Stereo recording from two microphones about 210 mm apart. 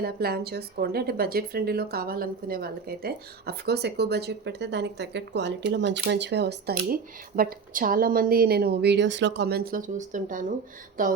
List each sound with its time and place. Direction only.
0.0 s speech: 50° right (ahead or behind)